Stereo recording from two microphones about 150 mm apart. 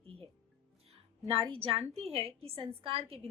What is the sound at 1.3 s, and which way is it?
A woman's voice, 35° right (ahead or behind).